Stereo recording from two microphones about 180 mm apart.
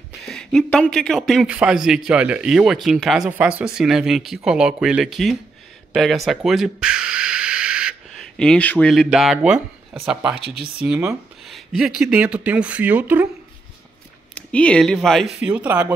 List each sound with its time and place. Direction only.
0.2 s speech: 5° left (ahead or behind)
14.3 s speech: 5° left (ahead or behind); by 15.9 s 10° right (ahead or behind)